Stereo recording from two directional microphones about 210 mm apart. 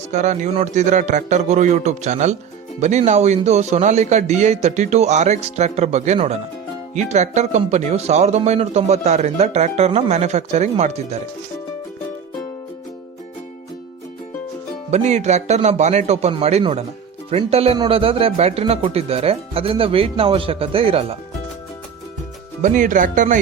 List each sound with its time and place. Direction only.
0.1 s speech: 35° right (ahead or behind)
14.8 s a man's voice: 35° right (ahead or behind)
22.6 s speech: 40° right (ahead or behind)